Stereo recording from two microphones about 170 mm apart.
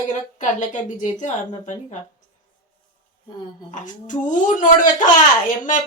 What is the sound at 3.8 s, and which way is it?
Speech, 50° left (ahead or behind).